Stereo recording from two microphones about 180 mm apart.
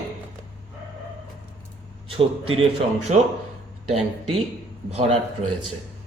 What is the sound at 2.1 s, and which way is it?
Speech, 30° right (ahead or behind).